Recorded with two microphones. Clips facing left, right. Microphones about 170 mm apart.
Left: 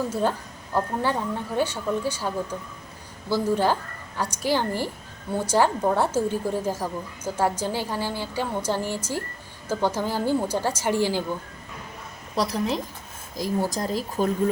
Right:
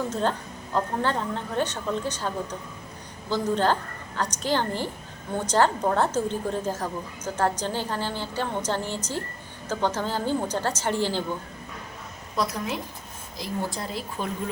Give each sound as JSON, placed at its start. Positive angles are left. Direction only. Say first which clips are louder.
{"t": 0.1, "sound": "a woman's voice", "louder": "left 1 dB", "side_deg": 10}
{"t": 12.4, "sound": "speech", "louder": "left 3 dB", "side_deg": 35}